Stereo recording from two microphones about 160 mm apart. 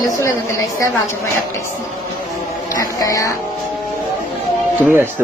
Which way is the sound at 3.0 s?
20° left (ahead or behind).